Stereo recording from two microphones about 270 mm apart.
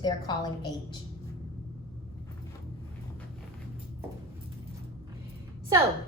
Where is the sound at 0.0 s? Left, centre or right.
Centre.